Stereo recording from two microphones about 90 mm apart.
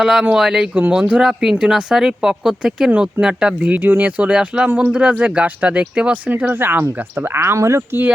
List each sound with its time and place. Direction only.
0.0 s speech: 5° right (ahead or behind); by 8.1 s 25° right (ahead or behind)